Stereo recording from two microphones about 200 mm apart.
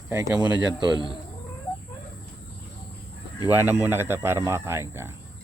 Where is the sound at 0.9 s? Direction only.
20° left (ahead or behind).